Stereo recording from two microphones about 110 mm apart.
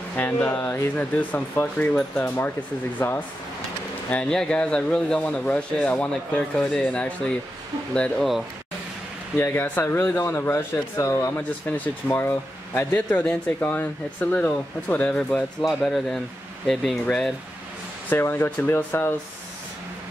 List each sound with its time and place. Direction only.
0.1 s speech: 15° left (ahead or behind)
9.4 s speech: 20° left (ahead or behind)
18.1 s speech: 20° left (ahead or behind)